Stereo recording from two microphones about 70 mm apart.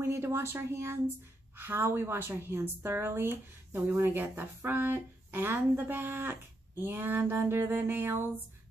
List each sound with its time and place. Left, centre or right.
0.0 s a woman's voice: right